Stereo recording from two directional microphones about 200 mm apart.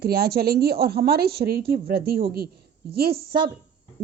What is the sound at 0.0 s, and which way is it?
A woman's voice, 50° right (ahead or behind).